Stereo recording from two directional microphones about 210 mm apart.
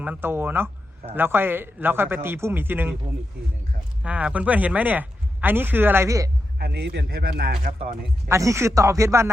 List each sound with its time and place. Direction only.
0.0 s speech: 10° right (ahead or behind)
4.0 s speech: 5° right (ahead or behind)
6.6 s a man's voice: 50° right (ahead or behind)
8.3 s speech: 15° right (ahead or behind)